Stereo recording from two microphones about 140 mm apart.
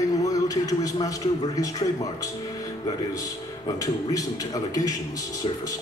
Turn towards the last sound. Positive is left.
turn(degrees=25)  # may be behind; listen again after turning